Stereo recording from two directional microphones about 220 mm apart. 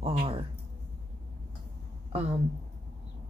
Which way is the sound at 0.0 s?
25° right (ahead or behind).